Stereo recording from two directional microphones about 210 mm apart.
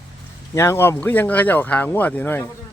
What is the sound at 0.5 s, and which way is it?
Speech, 15° left (ahead or behind).